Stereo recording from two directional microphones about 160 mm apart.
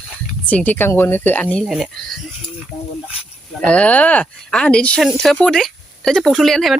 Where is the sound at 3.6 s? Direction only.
10° left (ahead or behind).